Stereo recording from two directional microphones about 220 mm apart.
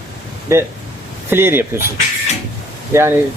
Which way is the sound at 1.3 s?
10° right (ahead or behind).